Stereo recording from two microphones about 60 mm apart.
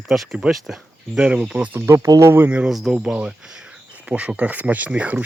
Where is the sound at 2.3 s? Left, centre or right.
Right.